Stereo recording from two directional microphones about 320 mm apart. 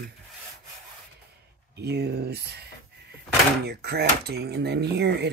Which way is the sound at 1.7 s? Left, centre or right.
Right.